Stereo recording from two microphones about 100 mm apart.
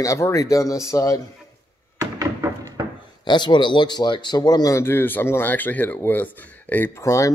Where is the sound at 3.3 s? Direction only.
50° left (ahead or behind).